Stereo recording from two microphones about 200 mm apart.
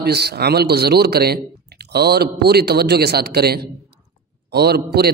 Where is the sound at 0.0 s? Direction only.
55° right (ahead or behind).